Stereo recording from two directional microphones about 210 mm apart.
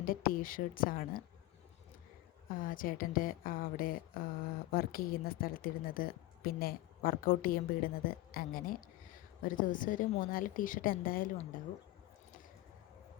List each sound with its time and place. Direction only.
0.0 s a woman's voice: 45° left (ahead or behind)
2.5 s a woman's voice: 40° left (ahead or behind)